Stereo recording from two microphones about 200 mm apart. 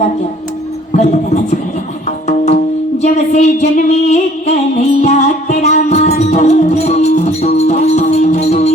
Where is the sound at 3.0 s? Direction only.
35° left (ahead or behind).